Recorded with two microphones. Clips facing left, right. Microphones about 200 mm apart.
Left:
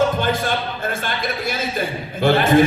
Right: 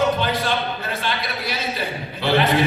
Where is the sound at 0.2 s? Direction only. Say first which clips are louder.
Left 1 dB; 50° left (ahead or behind).